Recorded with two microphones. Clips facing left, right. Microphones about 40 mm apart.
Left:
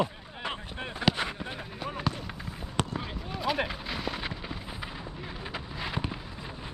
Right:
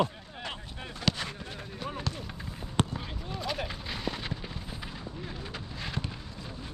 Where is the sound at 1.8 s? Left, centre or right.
Centre.